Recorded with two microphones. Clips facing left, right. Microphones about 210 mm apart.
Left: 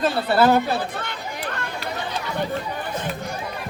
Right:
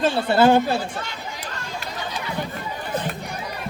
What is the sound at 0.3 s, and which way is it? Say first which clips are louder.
Speech: right 1 dB; 30° right (ahead or behind).